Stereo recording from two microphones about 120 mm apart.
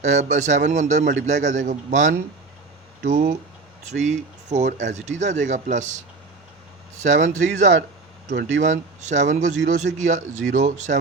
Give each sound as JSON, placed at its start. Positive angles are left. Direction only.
{"t": 0.0, "sound": "speech", "side_deg": -75}
{"t": 3.8, "sound": "speech", "side_deg": -85}
{"t": 7.0, "sound": "speech", "side_deg": -90}